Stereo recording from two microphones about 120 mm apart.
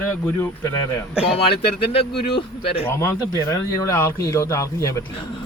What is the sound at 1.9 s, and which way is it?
Speech, 50° left (ahead or behind).